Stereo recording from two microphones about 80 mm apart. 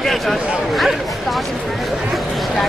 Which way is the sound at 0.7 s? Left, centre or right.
Centre.